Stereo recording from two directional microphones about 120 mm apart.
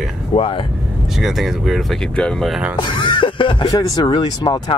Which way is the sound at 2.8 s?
40° left (ahead or behind).